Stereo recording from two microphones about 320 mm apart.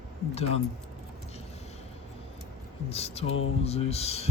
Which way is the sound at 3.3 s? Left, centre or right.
Left.